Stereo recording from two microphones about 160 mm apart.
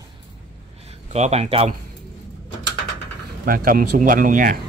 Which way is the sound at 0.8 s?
40° right (ahead or behind).